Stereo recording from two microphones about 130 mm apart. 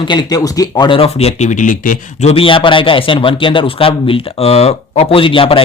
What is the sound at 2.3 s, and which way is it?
A man's voice, 45° left (ahead or behind).